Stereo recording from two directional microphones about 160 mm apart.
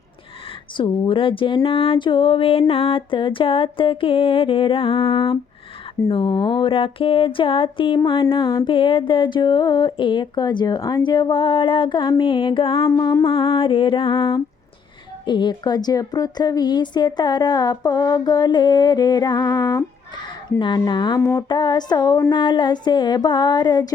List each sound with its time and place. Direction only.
0.8 s speech: 30° left (ahead or behind)
12.8 s a woman's voice: 20° left (ahead or behind)